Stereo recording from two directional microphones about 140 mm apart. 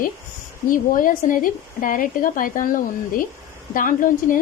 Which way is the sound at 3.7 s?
70° left (ahead or behind).